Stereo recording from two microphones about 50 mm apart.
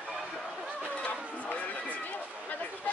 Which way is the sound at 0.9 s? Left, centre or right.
Left.